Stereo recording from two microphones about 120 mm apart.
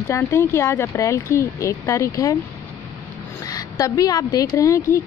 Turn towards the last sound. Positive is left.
turn(degrees=25)  # may be behind; listen again after turning